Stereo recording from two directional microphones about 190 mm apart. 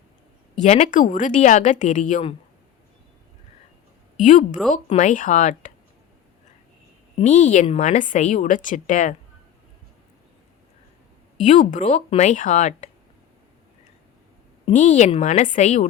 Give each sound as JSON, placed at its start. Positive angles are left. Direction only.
{"t": 0.6, "sound": "a woman's voice", "side_deg": 40}
{"t": 4.2, "sound": "a woman's voice", "side_deg": 40}
{"t": 7.2, "sound": "a woman's voice", "side_deg": 40}
{"t": 11.3, "sound": "a woman's voice", "side_deg": 40}
{"t": 14.6, "sound": "a woman's voice", "side_deg": 40}